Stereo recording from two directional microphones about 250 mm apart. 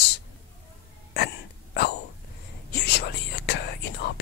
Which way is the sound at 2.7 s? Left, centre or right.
Left.